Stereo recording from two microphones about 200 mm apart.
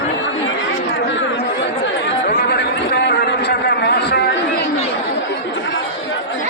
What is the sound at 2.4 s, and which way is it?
A man's voice, 55° left (ahead or behind).